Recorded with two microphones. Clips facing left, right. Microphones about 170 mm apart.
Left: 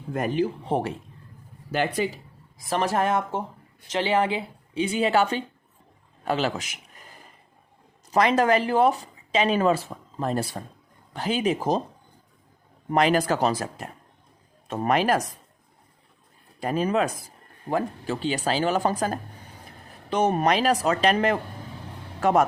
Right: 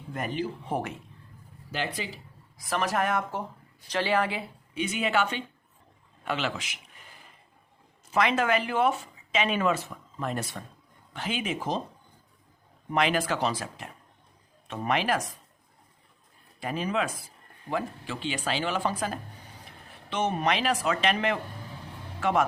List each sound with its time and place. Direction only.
0.1 s speech: 45° left (ahead or behind)
0.6 s speech: 30° left (ahead or behind)
1.7 s speech: 50° left (ahead or behind)
2.6 s speech: 30° left (ahead or behind)
8.1 s speech: 40° left (ahead or behind)
12.9 s speech: 40° left (ahead or behind)
16.6 s speech: 40° left (ahead or behind)